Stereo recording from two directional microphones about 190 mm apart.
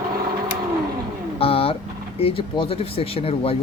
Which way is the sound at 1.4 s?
30° left (ahead or behind).